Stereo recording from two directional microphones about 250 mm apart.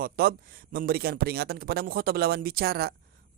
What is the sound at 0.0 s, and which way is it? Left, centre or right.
A man's voice, right.